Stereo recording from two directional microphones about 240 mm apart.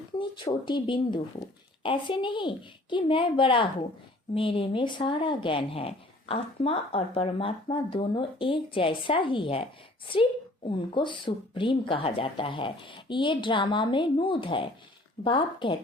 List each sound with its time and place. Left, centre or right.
0.2 s speech: left
10.7 s speech: centre